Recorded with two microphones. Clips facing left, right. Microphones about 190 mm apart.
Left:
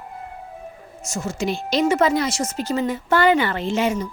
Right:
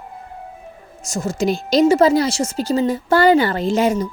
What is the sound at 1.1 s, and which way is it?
A woman's voice, 35° right (ahead or behind).